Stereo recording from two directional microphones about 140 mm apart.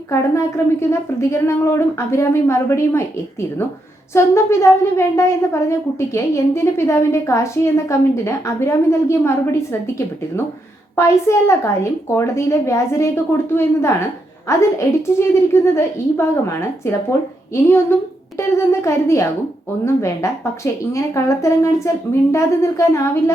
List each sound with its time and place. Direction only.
0.1 s a woman's voice: 20° left (ahead or behind)
4.1 s a woman's voice: 20° left (ahead or behind)
10.9 s a woman's voice: 20° left (ahead or behind)